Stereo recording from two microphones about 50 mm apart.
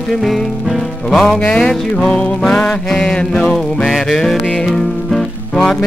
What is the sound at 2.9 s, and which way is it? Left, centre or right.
Mantra, centre.